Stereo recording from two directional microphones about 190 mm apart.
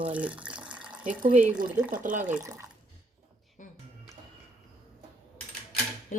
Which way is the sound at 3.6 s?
45° left (ahead or behind).